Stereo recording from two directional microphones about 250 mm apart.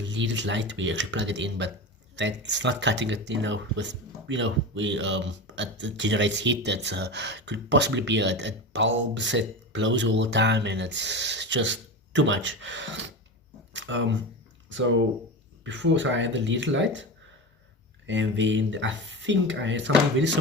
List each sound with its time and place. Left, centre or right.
0.1 s speech: right